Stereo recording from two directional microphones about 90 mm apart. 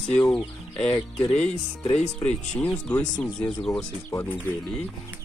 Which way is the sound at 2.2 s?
15° left (ahead or behind).